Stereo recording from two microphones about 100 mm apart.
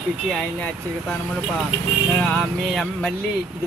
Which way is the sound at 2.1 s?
10° left (ahead or behind).